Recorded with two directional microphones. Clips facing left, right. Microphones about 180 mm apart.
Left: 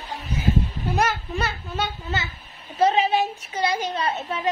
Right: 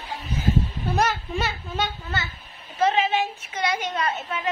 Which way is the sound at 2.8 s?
35° left (ahead or behind).